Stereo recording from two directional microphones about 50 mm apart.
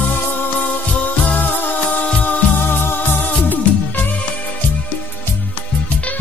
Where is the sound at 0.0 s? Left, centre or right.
Left.